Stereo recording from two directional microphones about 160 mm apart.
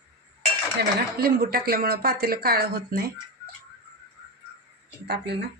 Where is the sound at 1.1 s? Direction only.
70° right (ahead or behind).